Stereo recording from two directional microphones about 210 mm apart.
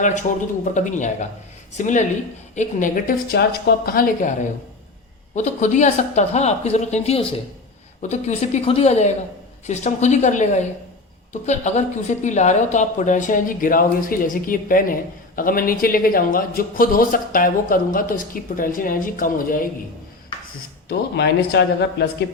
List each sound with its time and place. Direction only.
0.0 s a woman's voice: 35° left (ahead or behind)
21.2 s speech: 55° left (ahead or behind)